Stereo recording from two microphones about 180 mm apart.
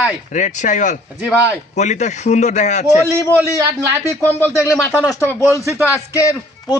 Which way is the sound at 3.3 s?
15° right (ahead or behind).